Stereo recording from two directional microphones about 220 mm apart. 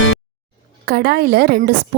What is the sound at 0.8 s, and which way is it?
Speech, 45° right (ahead or behind).